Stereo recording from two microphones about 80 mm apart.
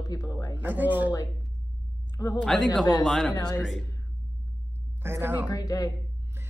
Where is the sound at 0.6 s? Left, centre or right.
Right.